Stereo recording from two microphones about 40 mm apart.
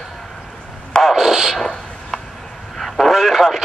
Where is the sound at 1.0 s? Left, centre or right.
Centre.